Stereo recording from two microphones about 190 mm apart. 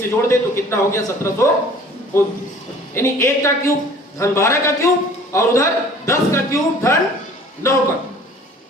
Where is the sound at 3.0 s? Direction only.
15° left (ahead or behind).